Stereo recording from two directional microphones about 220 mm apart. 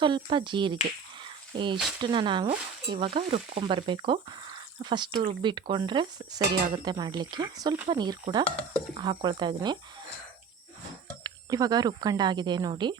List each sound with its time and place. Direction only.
0.0 s speech: 20° right (ahead or behind)
1.2 s a sound: 20° right (ahead or behind)
2.0 s speech: 20° right (ahead or behind)
11.2 s speech: 15° right (ahead or behind)